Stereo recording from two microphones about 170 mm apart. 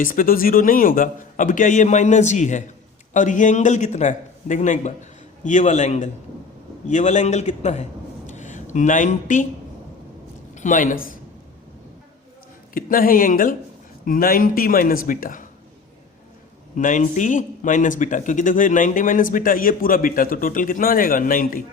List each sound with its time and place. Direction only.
0.0 s speech: 55° left (ahead or behind)
10.5 s a man's voice: 45° left (ahead or behind)
12.7 s speech: 55° left (ahead or behind)
16.7 s speech: 50° left (ahead or behind)